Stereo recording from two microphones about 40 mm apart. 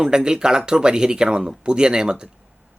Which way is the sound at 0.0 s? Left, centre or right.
Centre.